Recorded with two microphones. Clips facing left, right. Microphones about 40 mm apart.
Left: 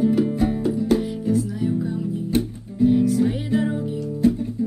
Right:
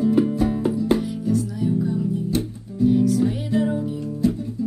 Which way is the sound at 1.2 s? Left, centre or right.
Left.